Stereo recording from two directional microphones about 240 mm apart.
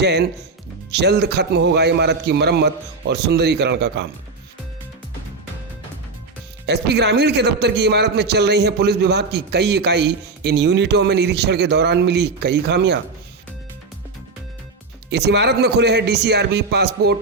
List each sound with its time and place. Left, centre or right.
0.0 s a man's voice: right
6.7 s a man's voice: right
15.1 s a man's voice: right